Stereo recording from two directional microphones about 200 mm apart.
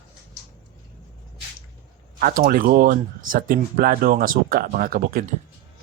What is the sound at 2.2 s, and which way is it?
Speech, 45° right (ahead or behind).